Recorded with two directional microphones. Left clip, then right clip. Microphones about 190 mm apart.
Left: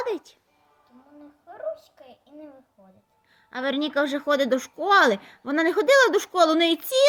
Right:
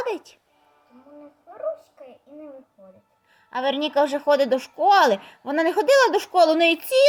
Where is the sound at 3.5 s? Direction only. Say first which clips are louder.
Right 3 dB; centre (ahead or behind).